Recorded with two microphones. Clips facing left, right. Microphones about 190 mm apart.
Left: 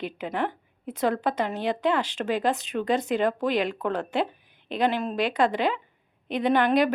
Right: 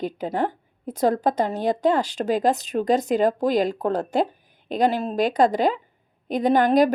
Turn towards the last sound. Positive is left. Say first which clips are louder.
# right 4 dB
turn(degrees=-40)  # may be behind; listen again after turning